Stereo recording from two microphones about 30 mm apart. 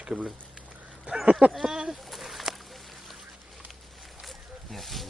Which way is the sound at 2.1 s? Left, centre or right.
Centre.